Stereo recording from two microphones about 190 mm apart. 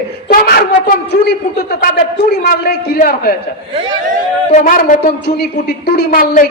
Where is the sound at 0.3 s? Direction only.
50° left (ahead or behind).